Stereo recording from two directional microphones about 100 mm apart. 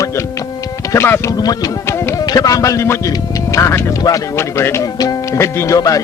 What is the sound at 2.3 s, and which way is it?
Speech, 35° left (ahead or behind).